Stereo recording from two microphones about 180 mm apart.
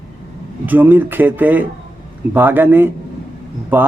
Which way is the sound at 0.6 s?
10° right (ahead or behind).